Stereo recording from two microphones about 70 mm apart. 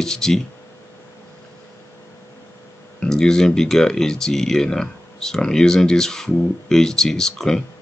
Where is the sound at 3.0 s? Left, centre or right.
Centre.